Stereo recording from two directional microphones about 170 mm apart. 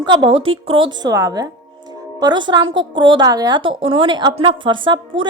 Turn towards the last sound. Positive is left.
turn(degrees=-30)  # may be behind; listen again after turning